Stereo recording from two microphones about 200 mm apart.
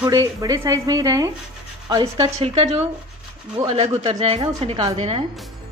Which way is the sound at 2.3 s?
30° right (ahead or behind).